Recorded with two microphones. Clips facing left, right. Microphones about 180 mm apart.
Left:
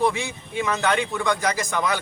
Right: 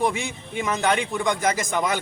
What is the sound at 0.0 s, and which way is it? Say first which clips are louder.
Speech: left 1 dB; 20° right (ahead or behind).